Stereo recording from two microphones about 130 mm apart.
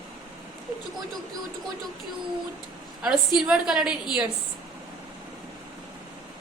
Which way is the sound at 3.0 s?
5° right (ahead or behind).